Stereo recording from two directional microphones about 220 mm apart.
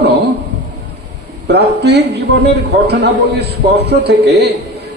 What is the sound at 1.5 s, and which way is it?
A man's voice, 50° right (ahead or behind).